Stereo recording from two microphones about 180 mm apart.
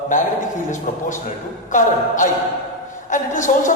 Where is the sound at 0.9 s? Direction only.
50° left (ahead or behind).